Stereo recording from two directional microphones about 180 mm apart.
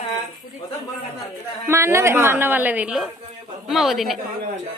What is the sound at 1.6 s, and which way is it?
A woman's voice, 15° right (ahead or behind).